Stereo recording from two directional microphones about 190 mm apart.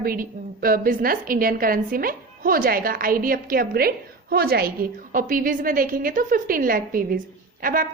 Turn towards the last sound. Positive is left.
turn(degrees=-45)  # may be behind; listen again after turning